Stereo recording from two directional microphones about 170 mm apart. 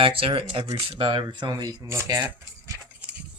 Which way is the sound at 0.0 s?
30° right (ahead or behind).